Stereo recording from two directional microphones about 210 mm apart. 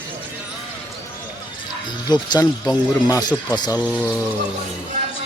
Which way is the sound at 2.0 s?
20° left (ahead or behind).